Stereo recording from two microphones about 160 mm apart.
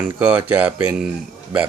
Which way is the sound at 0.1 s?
10° right (ahead or behind).